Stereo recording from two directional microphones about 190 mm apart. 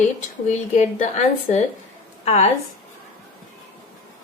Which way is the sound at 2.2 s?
35° left (ahead or behind).